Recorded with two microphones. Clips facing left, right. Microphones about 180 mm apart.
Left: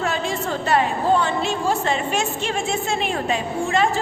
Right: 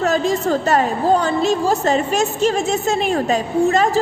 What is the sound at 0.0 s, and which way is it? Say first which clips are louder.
A woman's voice: right 7 dB; 40° right (ahead or behind).